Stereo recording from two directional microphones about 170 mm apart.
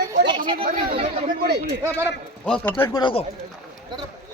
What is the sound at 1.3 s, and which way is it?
Speech, 65° right (ahead or behind).